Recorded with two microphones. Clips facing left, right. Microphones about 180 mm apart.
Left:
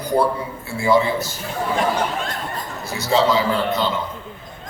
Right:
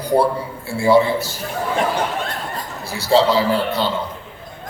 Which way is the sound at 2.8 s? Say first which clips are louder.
Right 3 dB; 30° right (ahead or behind).